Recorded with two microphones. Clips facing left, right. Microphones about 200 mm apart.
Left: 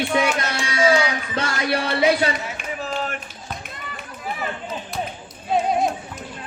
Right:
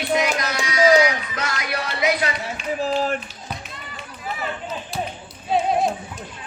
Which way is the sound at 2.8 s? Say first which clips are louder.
Right 6 dB; 35° right (ahead or behind).